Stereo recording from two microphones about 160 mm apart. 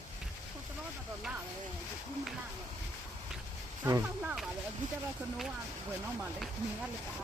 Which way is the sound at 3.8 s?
20° right (ahead or behind).